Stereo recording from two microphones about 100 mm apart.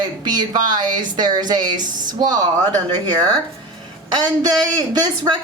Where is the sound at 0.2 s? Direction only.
45° right (ahead or behind).